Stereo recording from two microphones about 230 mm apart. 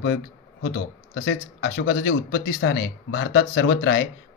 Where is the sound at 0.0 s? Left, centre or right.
Left.